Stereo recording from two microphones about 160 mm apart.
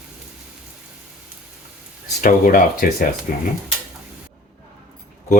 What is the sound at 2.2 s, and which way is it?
Speech, 60° left (ahead or behind).